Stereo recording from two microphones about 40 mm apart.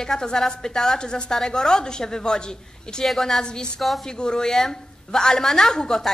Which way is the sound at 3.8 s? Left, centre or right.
Centre.